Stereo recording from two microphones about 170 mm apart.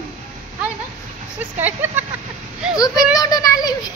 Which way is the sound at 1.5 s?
10° right (ahead or behind).